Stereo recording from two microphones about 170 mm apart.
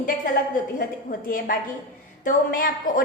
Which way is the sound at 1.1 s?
55° left (ahead or behind).